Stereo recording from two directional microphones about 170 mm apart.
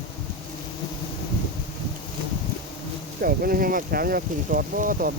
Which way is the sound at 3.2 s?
60° right (ahead or behind).